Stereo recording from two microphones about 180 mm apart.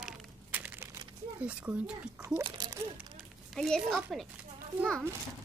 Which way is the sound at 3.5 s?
5° left (ahead or behind).